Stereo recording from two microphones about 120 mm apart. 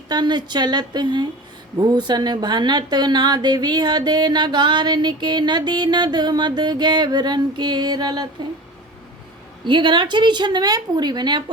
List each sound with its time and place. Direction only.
0.1 s a woman's voice: 35° right (ahead or behind)
9.6 s a woman's voice: 40° right (ahead or behind)